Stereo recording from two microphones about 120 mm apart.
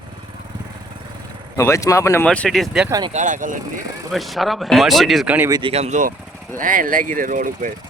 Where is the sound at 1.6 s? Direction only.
25° left (ahead or behind).